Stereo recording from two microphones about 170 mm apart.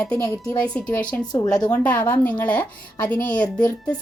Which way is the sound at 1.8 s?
10° left (ahead or behind).